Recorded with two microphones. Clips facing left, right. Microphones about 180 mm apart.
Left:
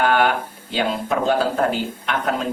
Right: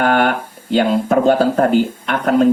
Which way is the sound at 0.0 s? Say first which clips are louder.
Right 3 dB; 45° right (ahead or behind).